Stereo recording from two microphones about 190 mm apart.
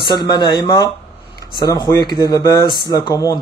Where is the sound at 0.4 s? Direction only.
25° left (ahead or behind).